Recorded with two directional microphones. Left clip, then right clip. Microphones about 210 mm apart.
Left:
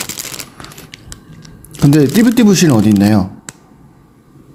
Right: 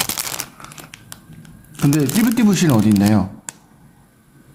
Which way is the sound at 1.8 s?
20° left (ahead or behind).